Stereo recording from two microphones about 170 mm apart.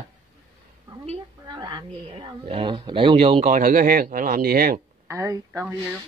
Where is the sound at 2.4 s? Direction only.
35° right (ahead or behind); by 4.8 s 55° right (ahead or behind).